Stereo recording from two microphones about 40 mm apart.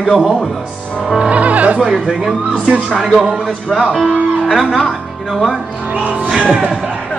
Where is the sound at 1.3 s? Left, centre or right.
Right.